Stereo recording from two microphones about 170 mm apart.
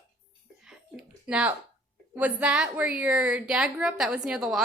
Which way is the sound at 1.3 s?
5° right (ahead or behind).